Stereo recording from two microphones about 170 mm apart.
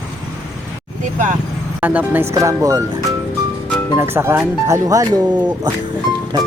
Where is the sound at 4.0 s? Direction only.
15° right (ahead or behind).